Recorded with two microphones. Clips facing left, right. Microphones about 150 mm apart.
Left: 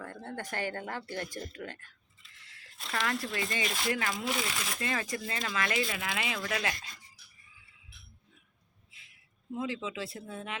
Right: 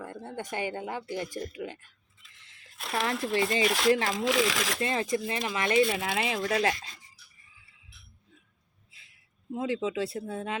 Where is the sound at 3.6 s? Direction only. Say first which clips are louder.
Right 8 dB; 80° right.